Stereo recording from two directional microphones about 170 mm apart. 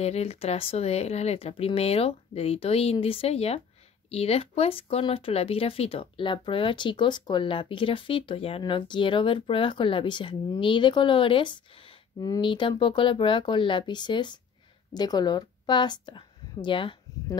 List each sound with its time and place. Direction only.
0.0 s a woman's voice: 40° left (ahead or behind)